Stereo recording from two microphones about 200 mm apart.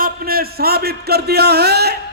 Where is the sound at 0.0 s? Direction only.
50° right (ahead or behind).